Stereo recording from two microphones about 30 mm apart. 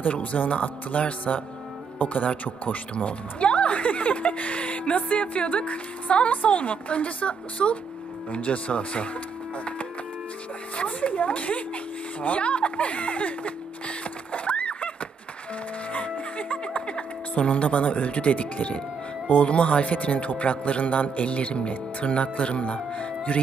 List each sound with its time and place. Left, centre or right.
0.1 s speech: left
0.5 s a man's voice: left
2.0 s speech: left
2.9 s a man's voice: left
6.3 s a man's voice: left
10.8 s speech: left
15.9 s music: left
17.3 s a man's voice: left